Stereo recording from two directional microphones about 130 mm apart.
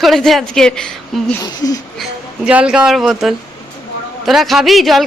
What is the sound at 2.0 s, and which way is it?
Speech, 10° right (ahead or behind).